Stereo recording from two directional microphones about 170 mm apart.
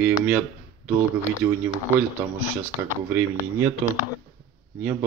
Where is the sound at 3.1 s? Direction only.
15° right (ahead or behind).